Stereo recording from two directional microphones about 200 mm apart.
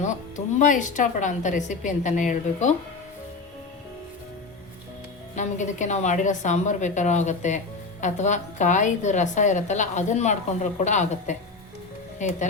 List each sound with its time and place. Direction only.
0.0 s a woman's voice: 40° left (ahead or behind)
5.3 s a woman's voice: 40° left (ahead or behind)